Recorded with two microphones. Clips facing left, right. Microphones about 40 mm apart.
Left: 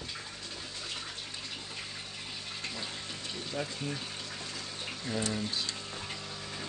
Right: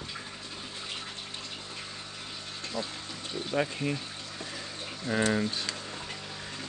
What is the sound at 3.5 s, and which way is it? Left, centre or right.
Speech, right.